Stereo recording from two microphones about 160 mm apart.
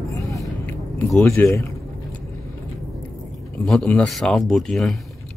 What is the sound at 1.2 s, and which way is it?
Speech, 15° left (ahead or behind).